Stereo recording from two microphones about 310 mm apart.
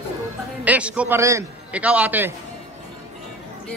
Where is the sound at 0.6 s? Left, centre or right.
Centre.